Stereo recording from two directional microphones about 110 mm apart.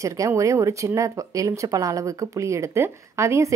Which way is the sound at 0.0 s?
30° right (ahead or behind).